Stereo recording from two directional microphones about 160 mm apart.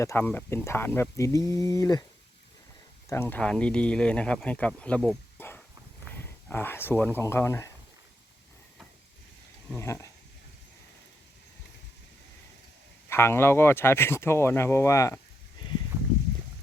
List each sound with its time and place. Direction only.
0.0 s speech: 15° left (ahead or behind)
1.1 s a sound: 20° left (ahead or behind)
3.1 s speech: 15° left (ahead or behind)
5.4 s a sound: 15° left (ahead or behind)
7.2 s speech: 15° left (ahead or behind)
9.7 s speech: 20° left (ahead or behind)
13.1 s speech: 15° left (ahead or behind)